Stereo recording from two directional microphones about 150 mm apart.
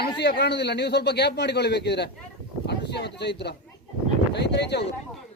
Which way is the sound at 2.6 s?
90° left.